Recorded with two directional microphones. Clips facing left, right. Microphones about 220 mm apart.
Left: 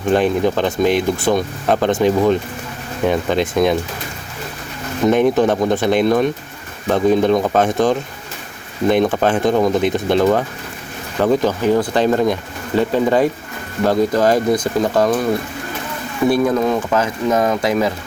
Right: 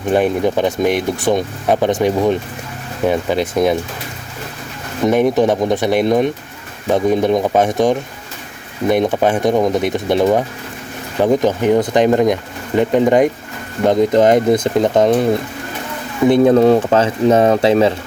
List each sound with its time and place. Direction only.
0.1 s speech: 10° right (ahead or behind)
5.0 s speech: 15° right (ahead or behind)
16.3 s speech: 30° right (ahead or behind)